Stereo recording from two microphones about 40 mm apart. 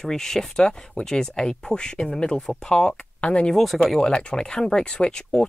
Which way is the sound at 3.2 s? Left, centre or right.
Left.